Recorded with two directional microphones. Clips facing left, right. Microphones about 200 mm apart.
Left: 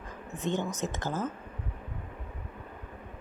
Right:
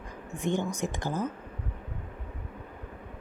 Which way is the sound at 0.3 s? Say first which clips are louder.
Right 2 dB; 15° right (ahead or behind).